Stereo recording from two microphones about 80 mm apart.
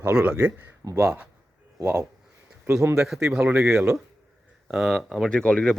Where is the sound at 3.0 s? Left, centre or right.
Centre.